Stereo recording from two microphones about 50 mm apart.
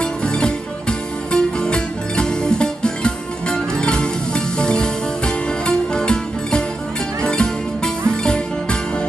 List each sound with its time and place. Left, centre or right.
0.0 s music: centre